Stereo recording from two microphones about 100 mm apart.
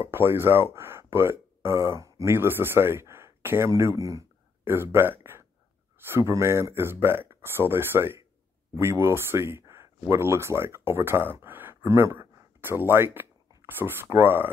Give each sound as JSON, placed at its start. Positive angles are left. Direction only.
{"t": 0.0, "sound": "speech", "side_deg": -25}